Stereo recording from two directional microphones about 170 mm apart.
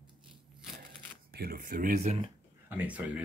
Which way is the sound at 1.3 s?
60° right (ahead or behind).